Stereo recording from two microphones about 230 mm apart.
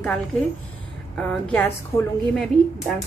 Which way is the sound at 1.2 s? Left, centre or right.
Centre.